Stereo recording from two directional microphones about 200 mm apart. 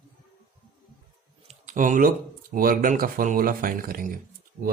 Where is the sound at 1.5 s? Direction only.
40° right (ahead or behind).